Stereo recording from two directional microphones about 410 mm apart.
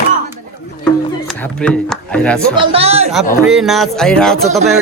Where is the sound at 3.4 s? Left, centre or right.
Centre.